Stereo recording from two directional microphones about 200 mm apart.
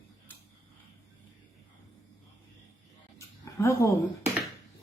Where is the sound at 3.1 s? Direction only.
15° left (ahead or behind).